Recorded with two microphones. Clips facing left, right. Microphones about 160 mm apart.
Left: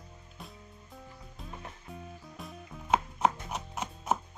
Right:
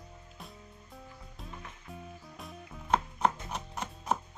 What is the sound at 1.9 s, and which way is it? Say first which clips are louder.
Music: right 2 dB; centre (ahead or behind).